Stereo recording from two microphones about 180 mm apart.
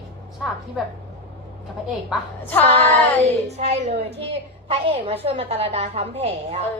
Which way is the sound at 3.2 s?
40° right (ahead or behind).